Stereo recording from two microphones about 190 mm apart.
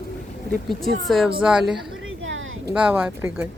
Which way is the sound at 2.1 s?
90° right.